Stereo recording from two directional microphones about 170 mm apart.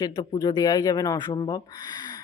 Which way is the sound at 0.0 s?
20° left (ahead or behind).